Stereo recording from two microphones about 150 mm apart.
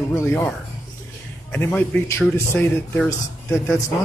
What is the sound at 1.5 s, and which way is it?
A man's voice, 15° left (ahead or behind).